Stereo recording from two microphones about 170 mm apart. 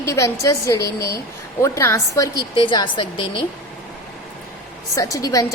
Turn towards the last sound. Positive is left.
turn(degrees=20)  # may be behind; listen again after turning